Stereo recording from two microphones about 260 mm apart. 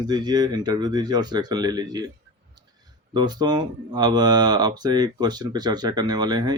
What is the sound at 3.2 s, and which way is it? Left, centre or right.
Speech, centre.